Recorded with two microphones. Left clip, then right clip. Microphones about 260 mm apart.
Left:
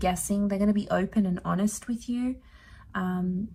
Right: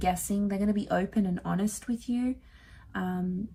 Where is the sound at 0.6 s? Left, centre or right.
Left.